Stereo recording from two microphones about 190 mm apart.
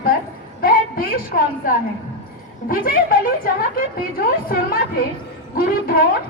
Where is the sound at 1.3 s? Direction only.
50° left (ahead or behind).